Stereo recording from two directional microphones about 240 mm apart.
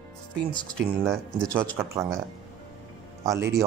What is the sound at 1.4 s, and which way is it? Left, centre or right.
Speech, centre.